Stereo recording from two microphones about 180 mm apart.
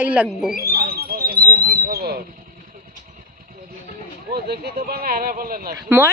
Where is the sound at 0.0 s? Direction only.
10° right (ahead or behind).